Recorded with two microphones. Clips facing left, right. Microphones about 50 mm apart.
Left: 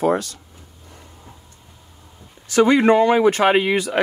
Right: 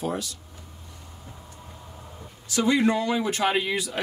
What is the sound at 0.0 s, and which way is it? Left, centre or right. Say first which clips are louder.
Speech: left 10 dB; left.